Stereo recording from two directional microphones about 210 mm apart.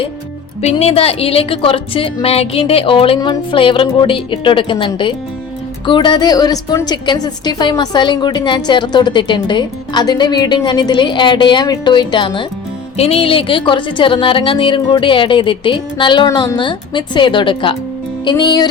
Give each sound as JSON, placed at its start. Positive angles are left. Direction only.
{"t": 0.6, "sound": "a woman's voice", "side_deg": 30}